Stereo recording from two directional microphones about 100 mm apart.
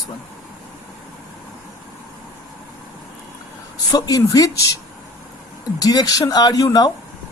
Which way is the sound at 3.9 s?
40° left (ahead or behind).